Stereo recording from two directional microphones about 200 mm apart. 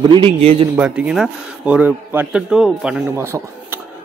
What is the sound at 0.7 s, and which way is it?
A man's voice, 5° right (ahead or behind).